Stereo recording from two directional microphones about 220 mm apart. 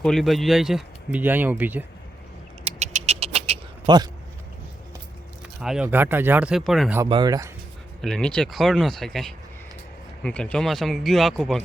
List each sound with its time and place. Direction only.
0.0 s speech: centre (ahead or behind)
2.6 s a sound: 30° right (ahead or behind)
5.5 s speech: 5° right (ahead or behind)
7.0 s speech: 20° right (ahead or behind)
8.0 s speech: 5° left (ahead or behind)